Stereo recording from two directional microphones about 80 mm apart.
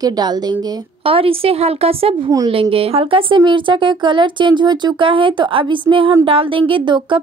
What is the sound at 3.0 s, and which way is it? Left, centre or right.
A woman's voice, right.